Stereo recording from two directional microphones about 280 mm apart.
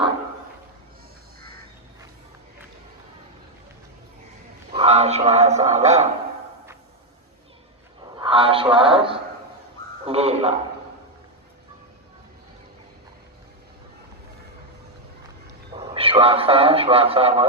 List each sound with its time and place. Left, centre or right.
4.7 s a man's voice: right
8.2 s speech: centre
10.1 s a man's voice: right
15.8 s a man's voice: centre